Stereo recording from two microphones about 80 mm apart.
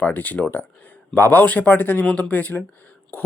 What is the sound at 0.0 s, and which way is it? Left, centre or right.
Speech, left.